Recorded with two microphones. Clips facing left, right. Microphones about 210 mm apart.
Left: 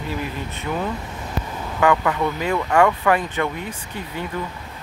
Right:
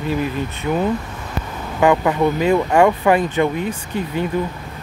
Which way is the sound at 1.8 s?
25° right (ahead or behind).